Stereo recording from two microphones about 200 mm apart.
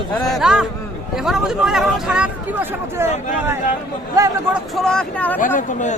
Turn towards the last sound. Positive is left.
turn(degrees=35)  # may be behind; listen again after turning